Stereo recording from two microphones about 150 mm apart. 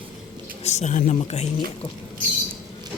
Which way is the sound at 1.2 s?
45° left (ahead or behind).